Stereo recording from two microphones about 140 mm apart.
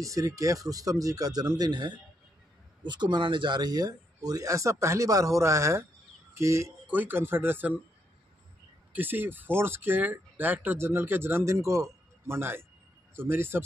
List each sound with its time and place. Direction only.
0.0 s speech: 25° right (ahead or behind)
8.9 s speech: 15° right (ahead or behind)